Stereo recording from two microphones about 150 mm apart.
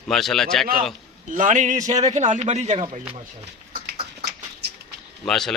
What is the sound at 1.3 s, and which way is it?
A man's voice, 55° right (ahead or behind).